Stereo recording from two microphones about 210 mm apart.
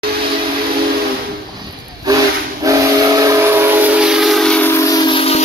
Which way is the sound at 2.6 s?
15° right (ahead or behind).